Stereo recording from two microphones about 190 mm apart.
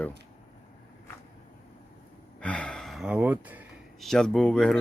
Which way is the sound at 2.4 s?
5° left (ahead or behind).